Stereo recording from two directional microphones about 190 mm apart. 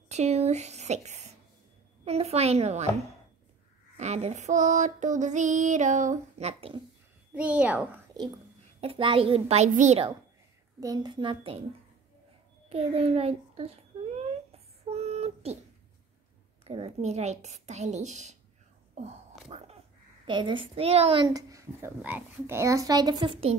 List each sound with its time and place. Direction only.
0.1 s child singing: 35° right (ahead or behind)
3.9 s child singing: 35° right (ahead or behind)
7.3 s a woman's voice: 5° right (ahead or behind)
8.8 s child singing: 30° right (ahead or behind)
10.8 s speech: 20° right (ahead or behind)
12.6 s a sound: 30° right (ahead or behind)
16.6 s child singing: 35° right (ahead or behind)
18.9 s a sound: 35° right (ahead or behind)
20.2 s speech: 25° right (ahead or behind)